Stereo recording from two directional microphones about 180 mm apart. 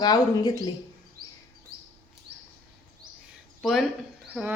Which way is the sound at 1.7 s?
60° right (ahead or behind).